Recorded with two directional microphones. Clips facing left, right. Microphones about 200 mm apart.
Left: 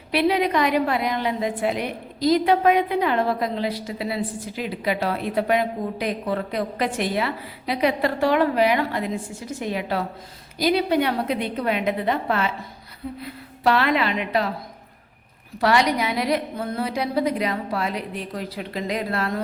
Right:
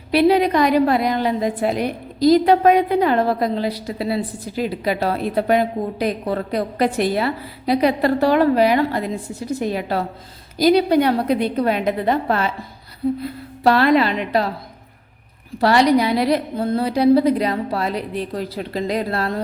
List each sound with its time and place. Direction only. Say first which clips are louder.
0.1 s a woman's voice: right 5 dB; 35° right (ahead or behind)
15.6 s a woman's voice: right 5 dB; 35° right (ahead or behind)